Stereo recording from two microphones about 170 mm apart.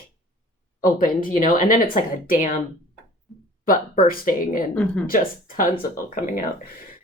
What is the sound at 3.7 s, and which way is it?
Speech, 55° left (ahead or behind).